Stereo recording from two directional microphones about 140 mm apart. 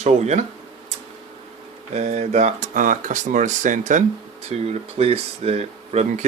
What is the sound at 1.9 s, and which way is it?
Speech, 55° right (ahead or behind).